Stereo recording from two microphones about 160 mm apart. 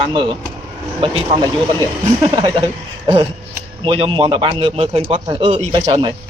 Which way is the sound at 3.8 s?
30° right (ahead or behind).